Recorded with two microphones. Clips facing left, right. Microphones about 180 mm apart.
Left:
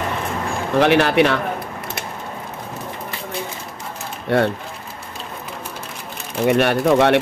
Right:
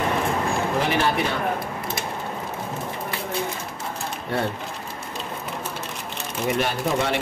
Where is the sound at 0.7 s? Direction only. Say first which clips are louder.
Left 11 dB; 75° left (ahead or behind).